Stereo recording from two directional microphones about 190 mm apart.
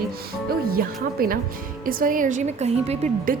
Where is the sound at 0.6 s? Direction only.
50° right (ahead or behind).